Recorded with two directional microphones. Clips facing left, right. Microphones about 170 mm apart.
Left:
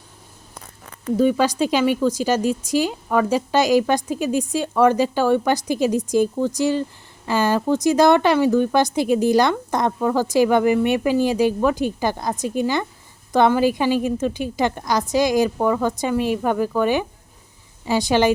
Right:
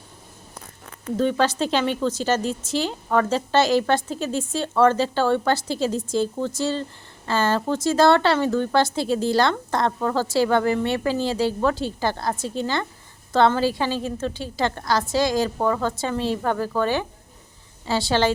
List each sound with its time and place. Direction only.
1.1 s a woman's voice: 10° left (ahead or behind)